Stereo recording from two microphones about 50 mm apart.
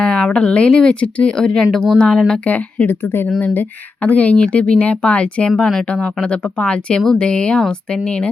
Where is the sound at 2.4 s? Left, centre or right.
Left.